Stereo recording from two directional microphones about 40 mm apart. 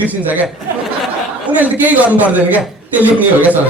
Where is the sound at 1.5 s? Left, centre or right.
Right.